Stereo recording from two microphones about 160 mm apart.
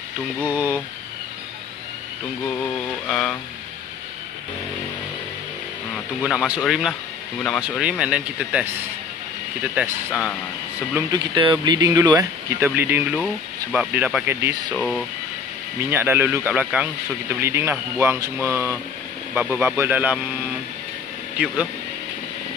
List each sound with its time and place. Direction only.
0.5 s speech: 10° right (ahead or behind)
3.1 s speech: 5° left (ahead or behind)
6.2 s speech: 5° right (ahead or behind)
11.1 s speech: 30° right (ahead or behind)
12.2 s speech: 15° right (ahead or behind)
14.8 s speech: 5° left (ahead or behind)
15.9 s speech: 15° right (ahead or behind)